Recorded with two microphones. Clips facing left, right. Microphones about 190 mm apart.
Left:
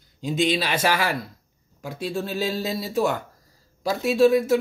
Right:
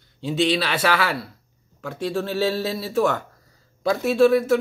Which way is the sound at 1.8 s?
15° left (ahead or behind).